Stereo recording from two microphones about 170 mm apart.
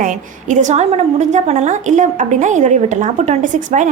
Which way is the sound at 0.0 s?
50° right (ahead or behind).